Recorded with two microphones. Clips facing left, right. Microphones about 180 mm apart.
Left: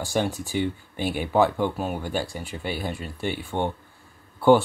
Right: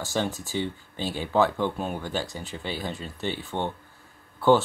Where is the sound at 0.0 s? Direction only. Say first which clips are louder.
Left 3 dB; 15° left (ahead or behind).